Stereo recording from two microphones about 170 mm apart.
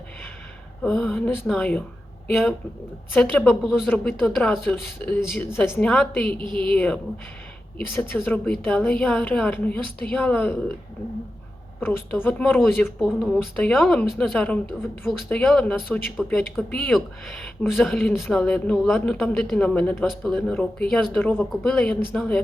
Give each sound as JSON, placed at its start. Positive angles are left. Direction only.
{"t": 0.8, "sound": "a woman's voice", "side_deg": 5}
{"t": 8.1, "sound": "a woman's voice", "side_deg": 10}
{"t": 11.9, "sound": "a woman's voice", "side_deg": 10}